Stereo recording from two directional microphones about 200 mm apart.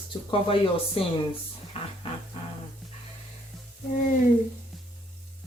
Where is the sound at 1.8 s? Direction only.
30° left (ahead or behind).